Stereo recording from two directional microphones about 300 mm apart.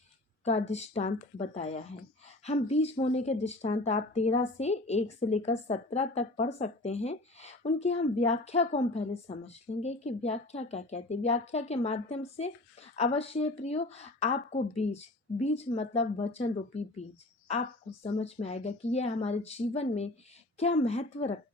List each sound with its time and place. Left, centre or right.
0.4 s speech: left